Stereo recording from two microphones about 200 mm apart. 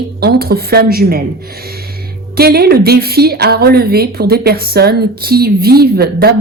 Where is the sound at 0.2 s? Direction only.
50° right (ahead or behind).